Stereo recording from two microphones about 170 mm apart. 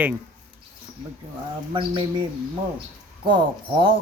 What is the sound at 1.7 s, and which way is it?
Speech, 30° right (ahead or behind).